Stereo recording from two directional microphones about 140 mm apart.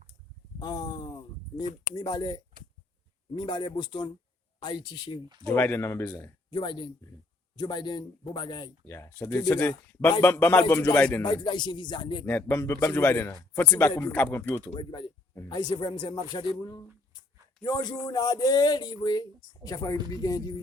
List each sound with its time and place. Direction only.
0.6 s a sound: 25° left (ahead or behind)
2.0 s a man's voice: 25° left (ahead or behind)
5.5 s speech: 15° left (ahead or behind)
6.5 s a man's voice: 35° left (ahead or behind)
8.9 s speech: 15° left (ahead or behind)
11.2 s speech: 35° left (ahead or behind)
12.2 s speech: 10° left (ahead or behind)
14.8 s a man's voice: 35° left (ahead or behind)